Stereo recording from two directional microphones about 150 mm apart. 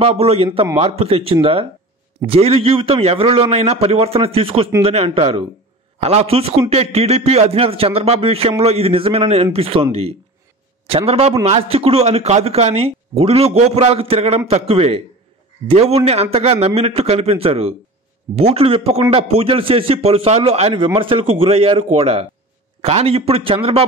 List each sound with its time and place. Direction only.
0.0 s a man's voice: 45° right (ahead or behind)
10.9 s a man's voice: 40° right (ahead or behind)